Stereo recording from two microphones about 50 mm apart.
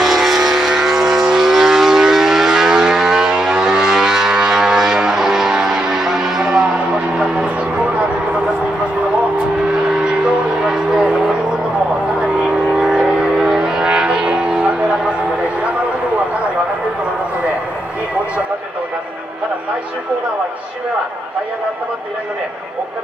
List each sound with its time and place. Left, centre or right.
0.0 s vehicle: centre
7.2 s a sound: right
9.8 s music: centre
12.4 s vehicle: centre